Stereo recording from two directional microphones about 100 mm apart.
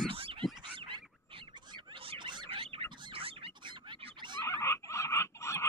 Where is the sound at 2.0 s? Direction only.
50° right (ahead or behind).